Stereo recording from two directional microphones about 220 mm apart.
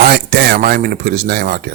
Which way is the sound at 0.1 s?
45° right (ahead or behind).